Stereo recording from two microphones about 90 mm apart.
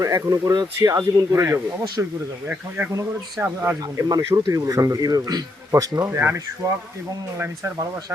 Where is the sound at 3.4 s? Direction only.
25° right (ahead or behind).